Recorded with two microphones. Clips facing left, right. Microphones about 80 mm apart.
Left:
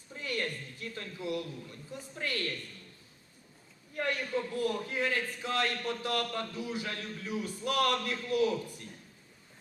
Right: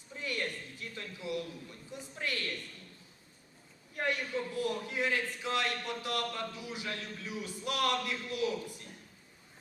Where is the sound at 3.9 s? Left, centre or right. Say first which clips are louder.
Left 1 dB; left.